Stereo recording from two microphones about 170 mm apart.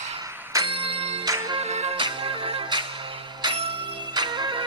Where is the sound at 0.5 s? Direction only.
30° right (ahead or behind).